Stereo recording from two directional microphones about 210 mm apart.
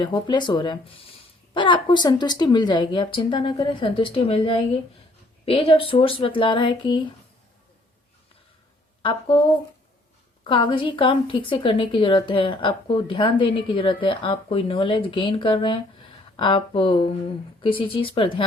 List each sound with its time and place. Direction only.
0.0 s a woman's voice: 20° left (ahead or behind)
9.0 s speech: 25° left (ahead or behind)
10.4 s a woman's voice: 20° left (ahead or behind)